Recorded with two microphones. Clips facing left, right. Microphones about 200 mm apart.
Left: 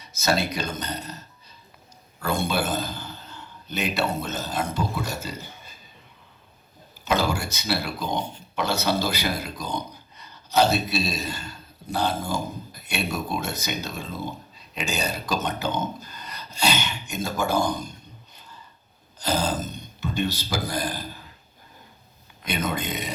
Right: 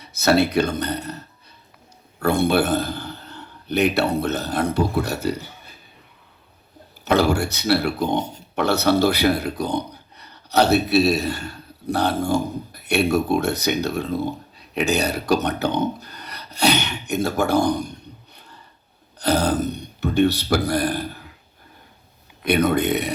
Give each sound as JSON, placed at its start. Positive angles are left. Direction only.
{"t": 0.0, "sound": "a man's voice", "side_deg": -60}
{"t": 7.0, "sound": "a man's voice", "side_deg": -65}
{"t": 19.2, "sound": "speech", "side_deg": -60}
{"t": 22.4, "sound": "a man's voice", "side_deg": -65}